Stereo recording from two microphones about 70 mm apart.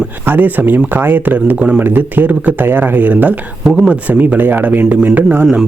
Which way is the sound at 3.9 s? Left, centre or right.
Right.